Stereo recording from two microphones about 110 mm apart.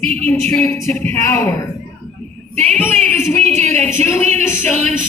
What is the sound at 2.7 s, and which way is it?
Speech, 15° left (ahead or behind).